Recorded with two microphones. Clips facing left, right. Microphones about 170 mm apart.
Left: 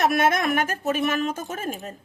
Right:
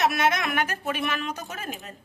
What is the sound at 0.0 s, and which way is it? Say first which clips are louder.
A woman's voice: left 3 dB; 50° left (ahead or behind).